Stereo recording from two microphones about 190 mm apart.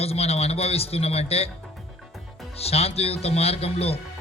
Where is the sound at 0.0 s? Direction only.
30° left (ahead or behind).